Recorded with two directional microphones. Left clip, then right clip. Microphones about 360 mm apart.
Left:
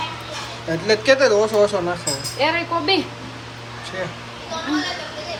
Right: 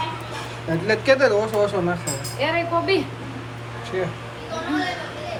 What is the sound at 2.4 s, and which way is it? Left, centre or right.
Speech, left.